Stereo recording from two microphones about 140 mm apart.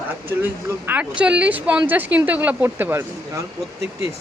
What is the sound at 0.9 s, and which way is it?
A woman's voice, 10° right (ahead or behind).